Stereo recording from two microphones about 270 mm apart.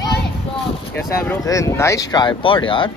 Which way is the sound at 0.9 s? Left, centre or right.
Centre.